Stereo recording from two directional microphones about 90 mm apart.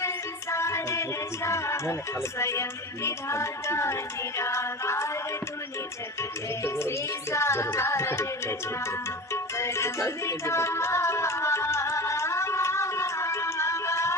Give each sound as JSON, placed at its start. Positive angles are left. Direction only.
{"t": 0.5, "sound": "music", "side_deg": 30}
{"t": 6.6, "sound": "music", "side_deg": 30}